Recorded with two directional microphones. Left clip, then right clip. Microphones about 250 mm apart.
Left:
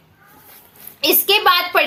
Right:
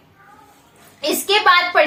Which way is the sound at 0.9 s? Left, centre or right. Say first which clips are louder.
Left 2 dB; left.